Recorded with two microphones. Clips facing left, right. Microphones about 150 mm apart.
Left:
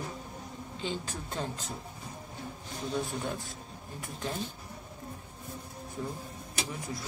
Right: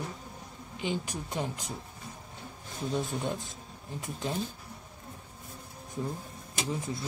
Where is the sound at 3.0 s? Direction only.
20° right (ahead or behind).